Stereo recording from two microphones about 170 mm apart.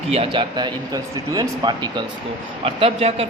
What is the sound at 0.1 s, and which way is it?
A man's voice, 30° right (ahead or behind).